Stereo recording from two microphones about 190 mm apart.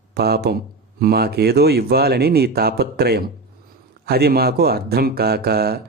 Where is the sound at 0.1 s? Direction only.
55° right (ahead or behind).